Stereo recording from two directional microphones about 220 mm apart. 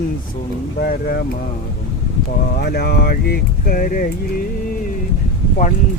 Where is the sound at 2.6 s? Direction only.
45° left (ahead or behind).